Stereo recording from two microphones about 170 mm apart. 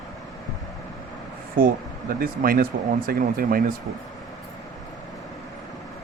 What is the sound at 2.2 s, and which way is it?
Speech, 55° right (ahead or behind).